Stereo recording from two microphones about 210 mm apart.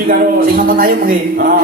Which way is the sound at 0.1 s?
40° right (ahead or behind).